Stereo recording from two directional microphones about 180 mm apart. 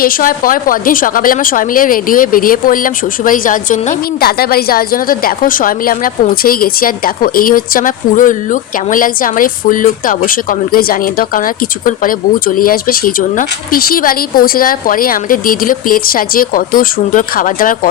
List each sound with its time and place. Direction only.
0.0 s a woman's voice: 50° left (ahead or behind)